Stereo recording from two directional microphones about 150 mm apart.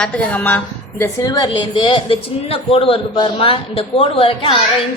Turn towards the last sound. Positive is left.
turn(degrees=35)  # may be behind; listen again after turning